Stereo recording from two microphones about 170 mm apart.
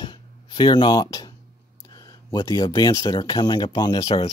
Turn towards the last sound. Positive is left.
turn(degrees=25)  # may be behind; listen again after turning